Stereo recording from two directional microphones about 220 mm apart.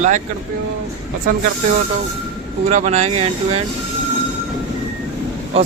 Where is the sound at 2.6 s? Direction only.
30° right (ahead or behind).